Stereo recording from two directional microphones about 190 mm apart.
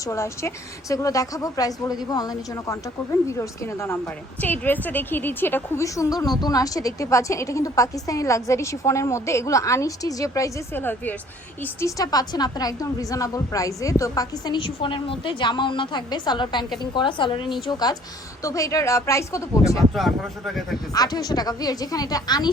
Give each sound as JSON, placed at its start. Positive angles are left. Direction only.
{"t": 0.0, "sound": "a woman's voice", "side_deg": 15}
{"t": 19.9, "sound": "speech", "side_deg": 0}
{"t": 20.9, "sound": "a woman's voice", "side_deg": 20}